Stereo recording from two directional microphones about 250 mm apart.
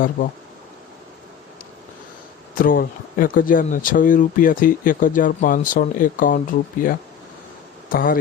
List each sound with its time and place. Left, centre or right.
2.6 s speech: left